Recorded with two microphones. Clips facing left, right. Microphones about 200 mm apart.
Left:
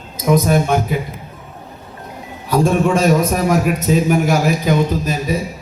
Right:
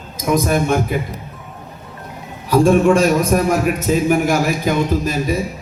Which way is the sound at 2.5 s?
50° right (ahead or behind).